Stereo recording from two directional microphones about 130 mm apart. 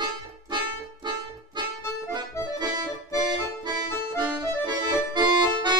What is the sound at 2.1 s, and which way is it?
Accordion, 35° right (ahead or behind).